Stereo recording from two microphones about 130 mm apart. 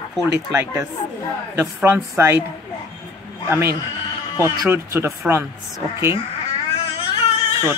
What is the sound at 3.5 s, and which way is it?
Speech, 20° right (ahead or behind).